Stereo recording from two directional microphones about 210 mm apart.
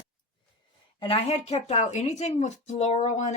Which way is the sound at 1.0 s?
25° left (ahead or behind).